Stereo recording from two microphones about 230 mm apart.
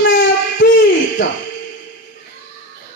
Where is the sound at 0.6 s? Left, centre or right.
Left.